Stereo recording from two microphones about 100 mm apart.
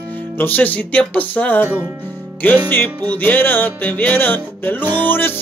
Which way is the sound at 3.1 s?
15° left (ahead or behind).